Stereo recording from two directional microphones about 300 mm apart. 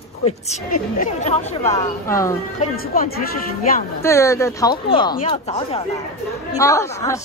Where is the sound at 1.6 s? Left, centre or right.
Centre.